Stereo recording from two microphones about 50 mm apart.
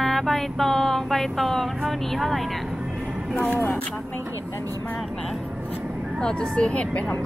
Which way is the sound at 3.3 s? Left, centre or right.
Left.